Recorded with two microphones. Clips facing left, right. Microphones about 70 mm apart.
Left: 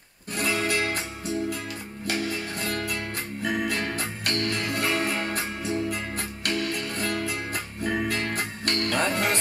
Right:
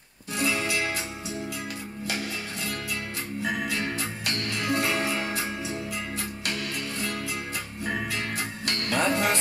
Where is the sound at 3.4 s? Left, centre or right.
Left.